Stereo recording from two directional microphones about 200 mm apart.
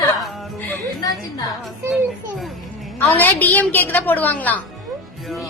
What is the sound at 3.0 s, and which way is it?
A woman's voice, 10° left (ahead or behind).